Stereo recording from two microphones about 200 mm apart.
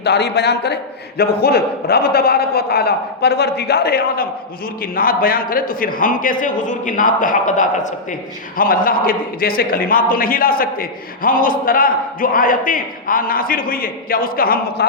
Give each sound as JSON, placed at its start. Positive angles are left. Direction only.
{"t": 0.0, "sound": "a man's voice", "side_deg": 55}